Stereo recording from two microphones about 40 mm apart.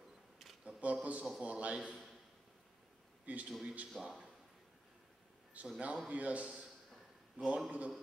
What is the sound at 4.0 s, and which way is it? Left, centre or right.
Speech, centre.